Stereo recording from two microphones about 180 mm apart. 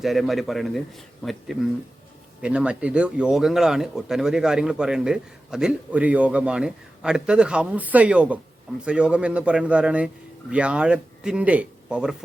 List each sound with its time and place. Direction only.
0.0 s a man's voice: centre (ahead or behind)